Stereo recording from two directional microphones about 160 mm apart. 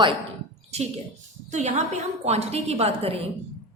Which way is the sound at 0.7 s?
40° right (ahead or behind).